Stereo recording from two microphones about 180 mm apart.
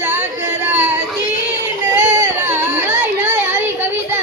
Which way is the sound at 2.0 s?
40° right (ahead or behind).